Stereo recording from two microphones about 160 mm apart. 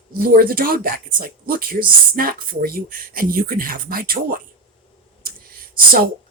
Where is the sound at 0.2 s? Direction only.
65° right (ahead or behind).